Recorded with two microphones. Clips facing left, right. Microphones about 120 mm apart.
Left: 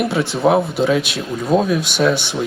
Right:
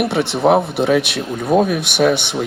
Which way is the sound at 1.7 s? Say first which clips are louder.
Left 1 dB; 60° right (ahead or behind).